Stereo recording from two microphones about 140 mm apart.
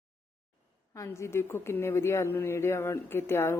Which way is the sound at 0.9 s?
20° left (ahead or behind).